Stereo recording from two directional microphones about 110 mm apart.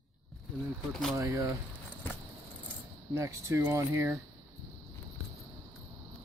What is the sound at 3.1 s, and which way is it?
Speech, 25° right (ahead or behind).